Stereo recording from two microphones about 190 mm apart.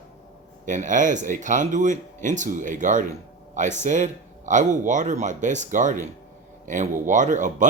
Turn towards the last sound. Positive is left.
turn(degrees=-40)  # may be behind; listen again after turning